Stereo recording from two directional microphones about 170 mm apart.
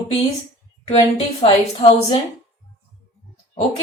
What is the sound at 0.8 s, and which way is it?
A woman's voice, 40° left (ahead or behind).